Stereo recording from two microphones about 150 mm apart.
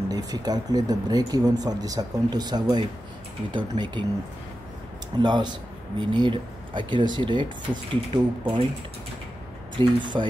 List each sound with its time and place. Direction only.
0.1 s speech: 25° right (ahead or behind)
5.2 s speech: 30° right (ahead or behind)
9.8 s speech: 30° right (ahead or behind)